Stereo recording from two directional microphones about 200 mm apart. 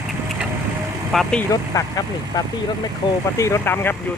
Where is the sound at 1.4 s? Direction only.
20° left (ahead or behind).